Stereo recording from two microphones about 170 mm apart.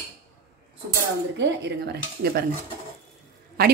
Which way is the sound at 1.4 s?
70° right (ahead or behind).